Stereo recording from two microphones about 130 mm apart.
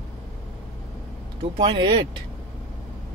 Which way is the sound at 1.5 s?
40° right (ahead or behind).